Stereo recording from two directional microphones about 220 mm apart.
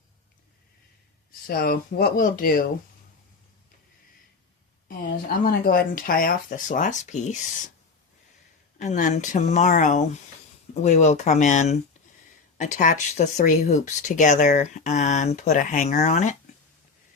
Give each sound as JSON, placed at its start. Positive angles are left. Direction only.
{"t": 1.5, "sound": "speech", "side_deg": 45}
{"t": 4.9, "sound": "speech", "side_deg": 40}
{"t": 8.8, "sound": "speech", "side_deg": 35}